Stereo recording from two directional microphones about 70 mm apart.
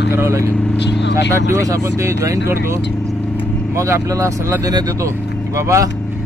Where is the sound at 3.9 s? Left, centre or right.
Right.